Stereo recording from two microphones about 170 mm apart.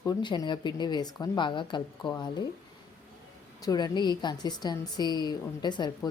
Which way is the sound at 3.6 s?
20° left (ahead or behind).